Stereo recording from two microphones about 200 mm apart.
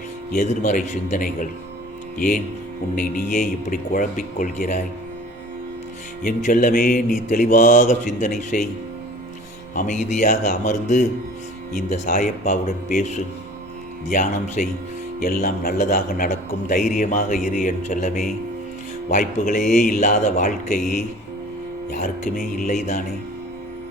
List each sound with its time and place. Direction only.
0.3 s a man's voice: 40° left (ahead or behind)
6.2 s a man's voice: 45° left (ahead or behind)
9.7 s a man's voice: 40° left (ahead or behind)
22.0 s a man's voice: 40° left (ahead or behind)